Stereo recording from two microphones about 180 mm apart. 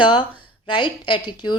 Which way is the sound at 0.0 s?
25° left (ahead or behind).